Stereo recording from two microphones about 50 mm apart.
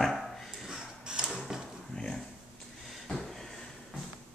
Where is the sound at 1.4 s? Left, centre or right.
Centre.